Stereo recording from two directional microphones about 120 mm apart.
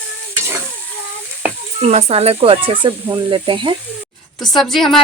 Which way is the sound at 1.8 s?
60° right (ahead or behind).